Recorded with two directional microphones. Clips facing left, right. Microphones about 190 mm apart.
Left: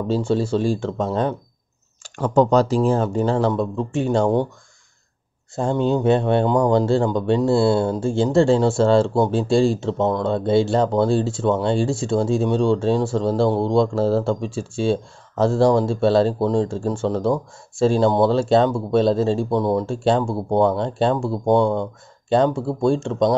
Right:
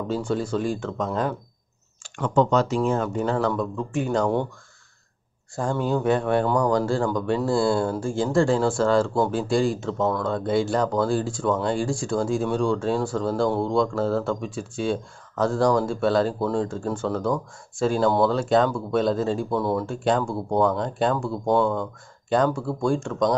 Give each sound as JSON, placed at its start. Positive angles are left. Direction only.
{"t": 0.1, "sound": "speech", "side_deg": 30}
{"t": 5.6, "sound": "speech", "side_deg": 25}